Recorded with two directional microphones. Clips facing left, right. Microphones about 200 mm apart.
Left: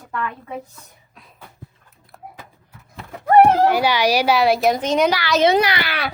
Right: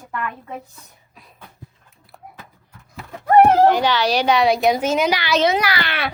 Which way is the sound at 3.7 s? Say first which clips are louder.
Left 1 dB; 10° left (ahead or behind).